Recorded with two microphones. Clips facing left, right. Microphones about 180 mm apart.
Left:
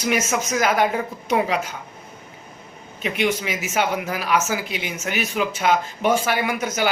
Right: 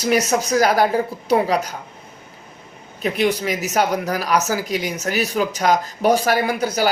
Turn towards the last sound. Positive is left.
turn(degrees=-35)  # may be behind; listen again after turning